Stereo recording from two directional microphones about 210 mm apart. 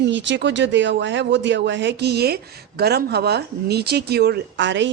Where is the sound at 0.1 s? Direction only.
60° right (ahead or behind).